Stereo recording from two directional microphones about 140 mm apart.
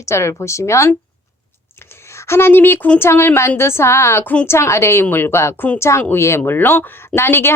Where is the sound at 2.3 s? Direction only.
15° left (ahead or behind).